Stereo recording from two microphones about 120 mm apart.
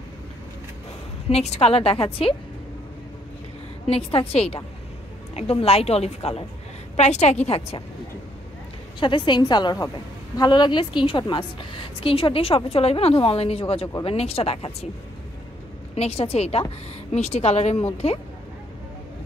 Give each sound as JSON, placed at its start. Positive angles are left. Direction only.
{"t": 1.3, "sound": "a woman's voice", "side_deg": 60}
{"t": 3.8, "sound": "a woman's voice", "side_deg": 55}
{"t": 7.0, "sound": "a woman's voice", "side_deg": 70}
{"t": 9.0, "sound": "a woman's voice", "side_deg": 40}
{"t": 15.9, "sound": "a woman's voice", "side_deg": 60}